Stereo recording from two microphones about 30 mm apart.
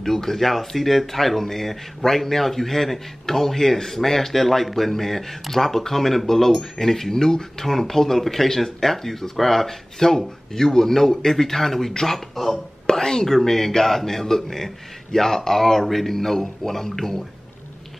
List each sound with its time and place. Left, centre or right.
0.0 s speech: centre